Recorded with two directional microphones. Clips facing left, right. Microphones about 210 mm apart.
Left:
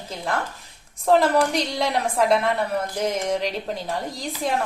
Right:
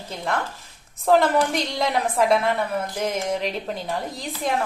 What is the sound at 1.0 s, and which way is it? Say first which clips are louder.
A woman's voice: even; centre (ahead or behind).